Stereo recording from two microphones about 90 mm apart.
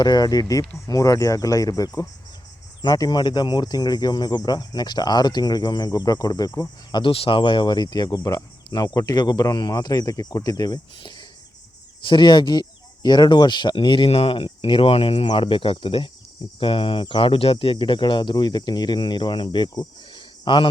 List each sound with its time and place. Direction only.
0.0 s speech: 50° left (ahead or behind)
7.0 s speech: 85° left
15.3 s speech: 75° left (ahead or behind)
20.1 s a sound: 65° left (ahead or behind)